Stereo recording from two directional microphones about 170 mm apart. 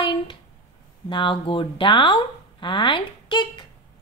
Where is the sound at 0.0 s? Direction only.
25° left (ahead or behind).